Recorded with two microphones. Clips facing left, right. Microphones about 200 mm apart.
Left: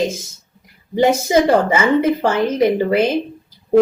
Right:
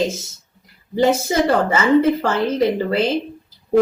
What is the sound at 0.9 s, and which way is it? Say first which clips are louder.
A woman's voice: left 2 dB; 15° left (ahead or behind).